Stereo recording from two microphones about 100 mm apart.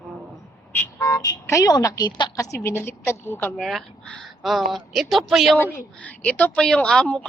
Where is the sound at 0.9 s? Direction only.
35° left (ahead or behind).